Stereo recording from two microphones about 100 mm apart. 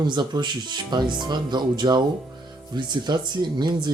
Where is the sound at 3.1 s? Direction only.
45° right (ahead or behind).